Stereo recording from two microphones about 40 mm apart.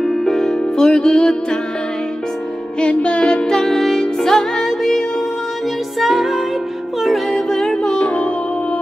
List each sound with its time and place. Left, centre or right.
0.0 s music: centre
2.8 s music: left
3.5 s music: centre
5.9 s music: centre
7.4 s music: centre